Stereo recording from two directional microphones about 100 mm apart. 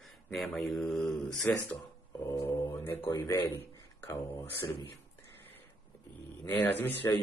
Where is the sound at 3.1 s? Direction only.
35° left (ahead or behind).